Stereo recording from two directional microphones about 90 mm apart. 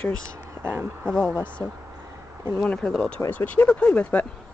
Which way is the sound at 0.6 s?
25° right (ahead or behind).